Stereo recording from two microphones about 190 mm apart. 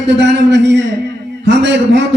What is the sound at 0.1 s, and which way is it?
A man's voice, 70° right (ahead or behind).